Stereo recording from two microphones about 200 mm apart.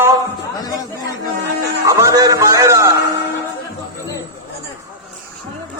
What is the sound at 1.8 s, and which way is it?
A man's voice, 15° right (ahead or behind).